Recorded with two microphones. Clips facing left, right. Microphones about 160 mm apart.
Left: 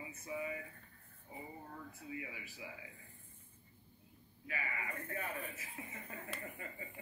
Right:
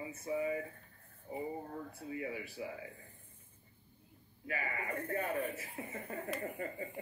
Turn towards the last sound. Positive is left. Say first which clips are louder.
# right 8 dB
turn(degrees=-40)  # may be behind; listen again after turning